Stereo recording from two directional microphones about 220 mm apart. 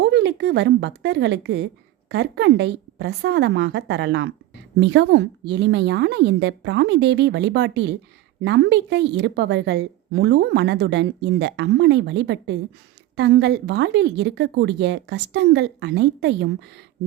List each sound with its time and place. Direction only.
0.0 s a woman's voice: 50° right (ahead or behind)